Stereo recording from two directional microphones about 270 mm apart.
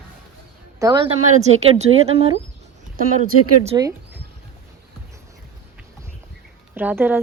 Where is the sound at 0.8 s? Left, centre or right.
Centre.